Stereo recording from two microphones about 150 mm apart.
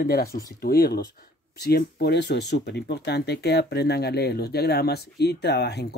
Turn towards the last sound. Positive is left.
turn(degrees=90)